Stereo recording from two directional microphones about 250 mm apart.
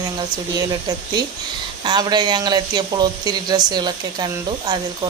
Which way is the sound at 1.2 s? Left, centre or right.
Centre.